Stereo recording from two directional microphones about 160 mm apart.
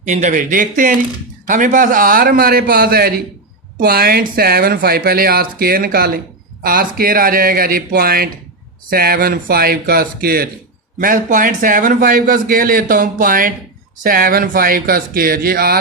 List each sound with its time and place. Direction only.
0.0 s a man's voice: 50° right (ahead or behind); by 10.5 s 70° right (ahead or behind)
11.0 s a man's voice: 60° right (ahead or behind)